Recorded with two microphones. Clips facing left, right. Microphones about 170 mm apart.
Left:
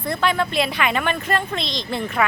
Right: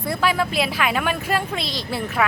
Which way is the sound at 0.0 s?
5° right (ahead or behind).